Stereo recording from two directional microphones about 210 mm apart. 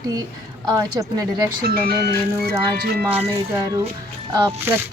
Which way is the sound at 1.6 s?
45° right (ahead or behind).